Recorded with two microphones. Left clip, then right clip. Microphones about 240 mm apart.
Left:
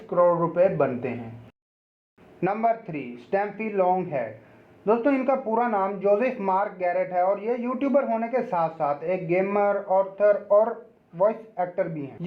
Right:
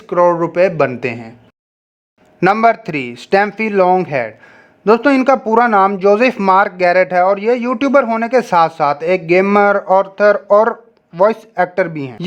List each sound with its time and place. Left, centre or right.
0.1 s speech: right
0.4 s a man's voice: right
2.4 s speech: right